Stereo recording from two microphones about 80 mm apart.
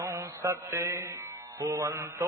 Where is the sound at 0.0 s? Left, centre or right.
Right.